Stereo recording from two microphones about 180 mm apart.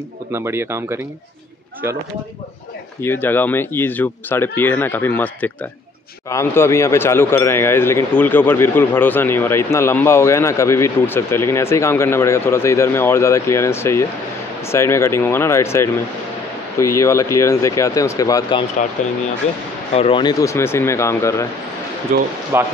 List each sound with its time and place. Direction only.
0.3 s speech: 15° right (ahead or behind)
3.0 s speech: 10° left (ahead or behind)
19.0 s speech: 45° left (ahead or behind)
19.9 s speech: 30° left (ahead or behind); by 21.5 s 15° left (ahead or behind)
22.1 s speech: 55° right (ahead or behind)
22.5 s speech: 15° right (ahead or behind)